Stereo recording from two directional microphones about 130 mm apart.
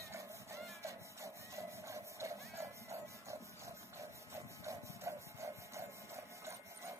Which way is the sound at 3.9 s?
25° right (ahead or behind).